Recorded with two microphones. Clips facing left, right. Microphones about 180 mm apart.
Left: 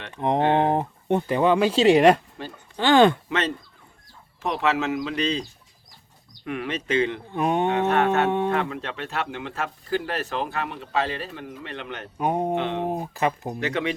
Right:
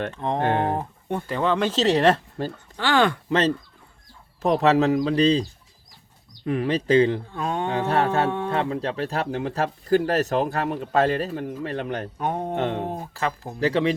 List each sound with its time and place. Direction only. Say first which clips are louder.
0.1 s speech: left 8 dB; 15° left (ahead or behind)
3.2 s speech: right 5 dB; 35° right (ahead or behind)
7.3 s speech: left 4 dB; 20° left (ahead or behind)
7.7 s speech: left 1 dB; 30° right (ahead or behind)
12.1 s speech: left 7 dB; 10° left (ahead or behind)
12.5 s speech: right 1 dB; 45° right (ahead or behind)
12.9 s speech: left 3 dB; 15° left (ahead or behind)
13.6 s speech: right 7 dB; 35° right (ahead or behind)